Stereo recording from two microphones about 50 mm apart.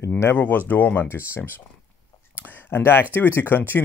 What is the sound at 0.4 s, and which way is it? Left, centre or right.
Speech, left.